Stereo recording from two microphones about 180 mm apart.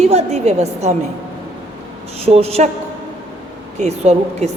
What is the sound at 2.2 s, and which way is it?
Speech, 35° right (ahead or behind).